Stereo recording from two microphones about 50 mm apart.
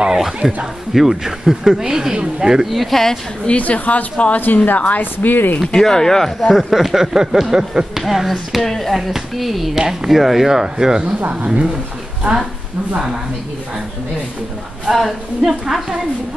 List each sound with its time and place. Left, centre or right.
0.0 s speech: centre
2.7 s speech: centre
3.4 s speech: left
5.7 s speech: centre
11.1 s speech: right
14.9 s speech: centre